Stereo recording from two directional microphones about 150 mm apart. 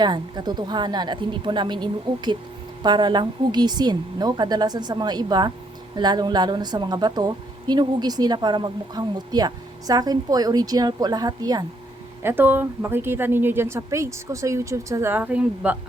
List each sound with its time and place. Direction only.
0.0 s speech: 30° right (ahead or behind)
12.2 s a woman's voice: 15° right (ahead or behind)